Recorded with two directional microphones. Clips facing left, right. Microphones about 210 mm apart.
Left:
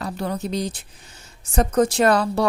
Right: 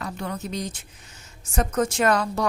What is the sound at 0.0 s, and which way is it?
A woman's voice, 35° left (ahead or behind).